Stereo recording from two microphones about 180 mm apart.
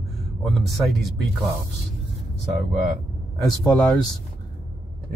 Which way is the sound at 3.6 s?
5° left (ahead or behind).